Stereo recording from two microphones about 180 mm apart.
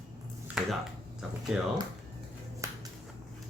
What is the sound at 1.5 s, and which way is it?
Speech, 5° right (ahead or behind).